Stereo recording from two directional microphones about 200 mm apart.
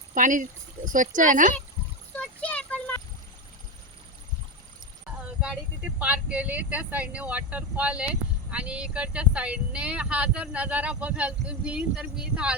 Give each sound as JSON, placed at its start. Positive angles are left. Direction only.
{"t": 0.1, "sound": "speech", "side_deg": -40}
{"t": 2.1, "sound": "a sound", "side_deg": 5}
{"t": 6.0, "sound": "speech", "side_deg": -5}